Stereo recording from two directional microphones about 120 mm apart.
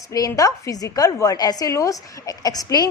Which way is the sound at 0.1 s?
30° left (ahead or behind).